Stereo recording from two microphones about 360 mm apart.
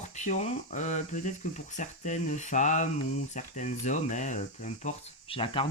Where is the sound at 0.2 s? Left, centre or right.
Centre.